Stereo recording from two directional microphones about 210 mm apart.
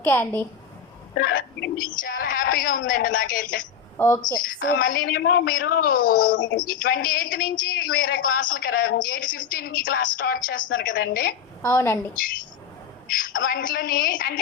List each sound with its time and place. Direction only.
0.0 s a woman's voice: 10° left (ahead or behind)
1.1 s a woman's voice: 45° left (ahead or behind)
3.9 s a woman's voice: 10° left (ahead or behind)
4.6 s a woman's voice: 40° left (ahead or behind)
11.6 s a woman's voice: 10° left (ahead or behind)
13.1 s a sound: 40° left (ahead or behind)
13.4 s a woman's voice: 40° left (ahead or behind)